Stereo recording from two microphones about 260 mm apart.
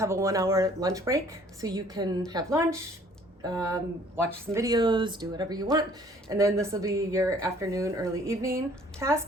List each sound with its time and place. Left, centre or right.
0.0 s speech: centre